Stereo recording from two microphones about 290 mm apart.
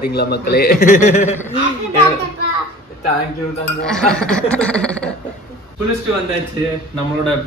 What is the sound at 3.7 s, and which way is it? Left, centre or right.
Speech, centre.